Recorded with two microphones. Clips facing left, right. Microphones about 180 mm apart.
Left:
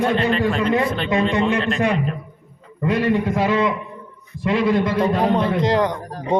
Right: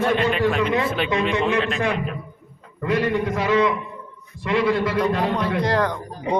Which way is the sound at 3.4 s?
20° left (ahead or behind).